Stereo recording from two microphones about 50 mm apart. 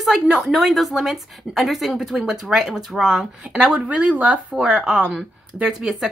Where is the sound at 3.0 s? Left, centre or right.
Centre.